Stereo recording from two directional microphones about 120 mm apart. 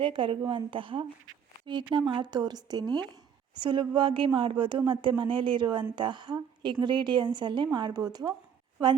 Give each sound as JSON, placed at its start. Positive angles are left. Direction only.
{"t": 0.0, "sound": "speech", "side_deg": -45}